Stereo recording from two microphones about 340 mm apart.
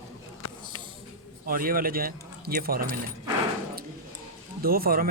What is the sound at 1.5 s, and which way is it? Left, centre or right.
A man's voice, right.